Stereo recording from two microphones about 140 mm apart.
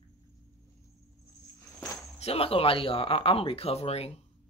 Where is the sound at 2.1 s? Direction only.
45° left (ahead or behind).